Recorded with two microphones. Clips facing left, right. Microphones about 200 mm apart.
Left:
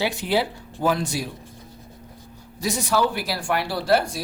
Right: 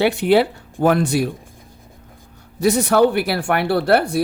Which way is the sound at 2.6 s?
60° right (ahead or behind).